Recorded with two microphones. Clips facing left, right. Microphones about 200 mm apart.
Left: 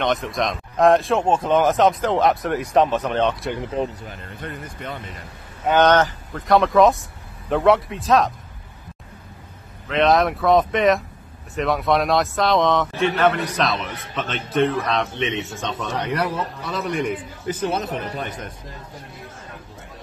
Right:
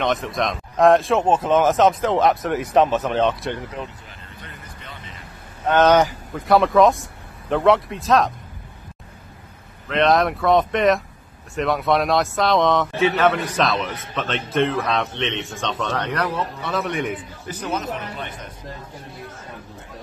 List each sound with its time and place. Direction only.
0.0 s a man's voice: centre (ahead or behind)
3.8 s speech: 35° left (ahead or behind)
4.4 s speech: 50° left (ahead or behind)
5.9 s a man's voice: 10° right (ahead or behind)
9.8 s a man's voice: centre (ahead or behind)
17.6 s speech: 35° left (ahead or behind)